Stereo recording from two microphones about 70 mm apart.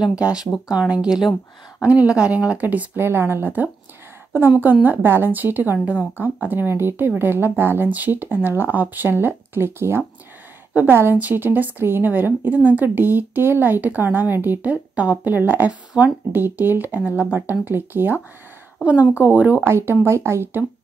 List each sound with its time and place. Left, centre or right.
0.0 s speech: centre
3.0 s speech: right
10.7 s a woman's voice: right
19.6 s speech: right